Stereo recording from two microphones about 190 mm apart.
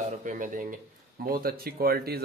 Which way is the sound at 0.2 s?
45° right (ahead or behind).